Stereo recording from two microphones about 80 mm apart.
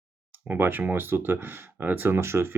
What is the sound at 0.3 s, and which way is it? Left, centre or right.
Speech, right.